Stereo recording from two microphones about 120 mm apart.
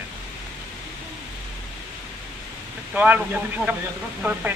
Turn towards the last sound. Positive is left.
turn(degrees=-15)  # may be behind; listen again after turning